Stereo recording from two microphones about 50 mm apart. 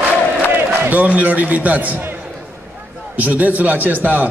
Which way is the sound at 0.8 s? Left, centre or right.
Right.